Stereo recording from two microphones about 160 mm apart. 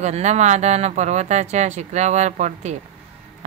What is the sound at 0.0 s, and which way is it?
Speech, 45° right (ahead or behind).